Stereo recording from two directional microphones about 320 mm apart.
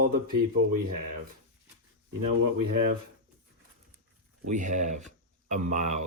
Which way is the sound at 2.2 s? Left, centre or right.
Right.